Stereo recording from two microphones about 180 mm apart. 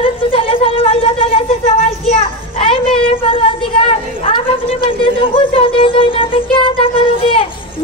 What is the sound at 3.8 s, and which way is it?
A woman's voice, 30° left (ahead or behind).